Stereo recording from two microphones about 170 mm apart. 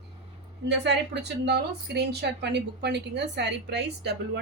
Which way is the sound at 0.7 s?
85° right.